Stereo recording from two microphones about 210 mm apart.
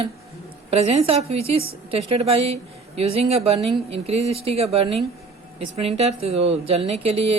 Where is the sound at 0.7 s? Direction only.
30° right (ahead or behind).